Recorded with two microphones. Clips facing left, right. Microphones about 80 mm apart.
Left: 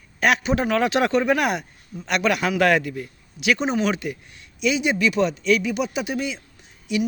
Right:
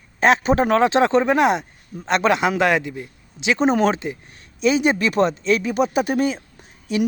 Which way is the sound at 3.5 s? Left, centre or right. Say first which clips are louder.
Right 10 dB; right.